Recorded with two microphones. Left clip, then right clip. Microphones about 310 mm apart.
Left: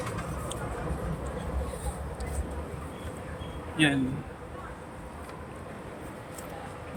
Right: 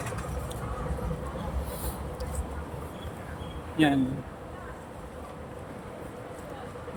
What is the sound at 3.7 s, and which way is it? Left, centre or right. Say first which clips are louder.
Speech: right 1 dB; centre.